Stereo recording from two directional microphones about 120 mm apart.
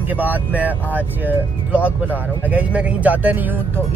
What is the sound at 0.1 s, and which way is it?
Speech, 15° right (ahead or behind).